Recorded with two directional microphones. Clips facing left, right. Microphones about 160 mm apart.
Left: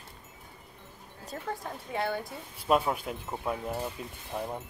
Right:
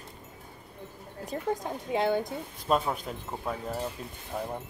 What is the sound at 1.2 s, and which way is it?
A woman's voice, 15° right (ahead or behind).